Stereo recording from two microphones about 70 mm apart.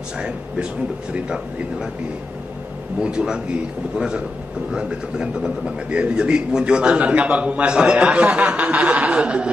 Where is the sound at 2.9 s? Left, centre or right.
Centre.